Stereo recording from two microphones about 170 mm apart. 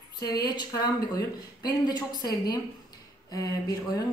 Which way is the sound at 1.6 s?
25° left (ahead or behind).